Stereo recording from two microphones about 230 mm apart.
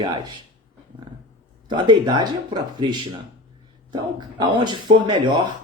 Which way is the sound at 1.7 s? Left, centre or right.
Centre.